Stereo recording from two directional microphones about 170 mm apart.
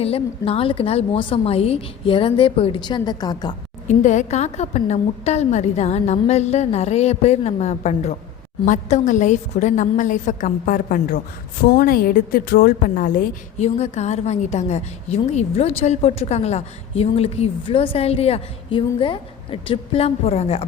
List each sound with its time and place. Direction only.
0.0 s a woman's voice: 35° left (ahead or behind)
3.8 s a woman's voice: 45° left (ahead or behind)
13.7 s a woman's voice: 40° left (ahead or behind)